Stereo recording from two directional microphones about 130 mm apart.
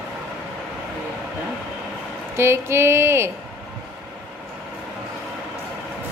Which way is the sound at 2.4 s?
20° right (ahead or behind).